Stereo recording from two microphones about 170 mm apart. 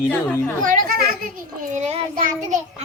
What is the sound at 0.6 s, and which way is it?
A child's voice, 55° right (ahead or behind).